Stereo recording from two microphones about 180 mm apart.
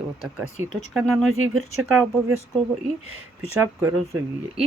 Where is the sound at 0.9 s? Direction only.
Centre (ahead or behind).